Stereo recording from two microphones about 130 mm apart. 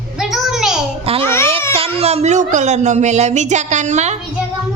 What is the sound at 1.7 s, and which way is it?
Speech, 50° right (ahead or behind).